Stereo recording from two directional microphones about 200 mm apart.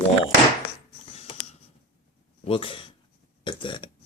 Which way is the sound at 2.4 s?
25° left (ahead or behind).